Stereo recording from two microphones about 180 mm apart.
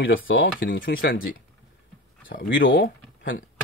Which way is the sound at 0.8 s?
55° left (ahead or behind).